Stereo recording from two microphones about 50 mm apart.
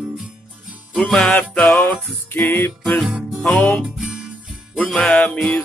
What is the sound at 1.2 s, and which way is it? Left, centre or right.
Music, left.